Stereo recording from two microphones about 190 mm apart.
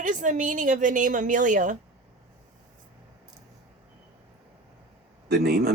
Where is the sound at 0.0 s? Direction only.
40° right (ahead or behind).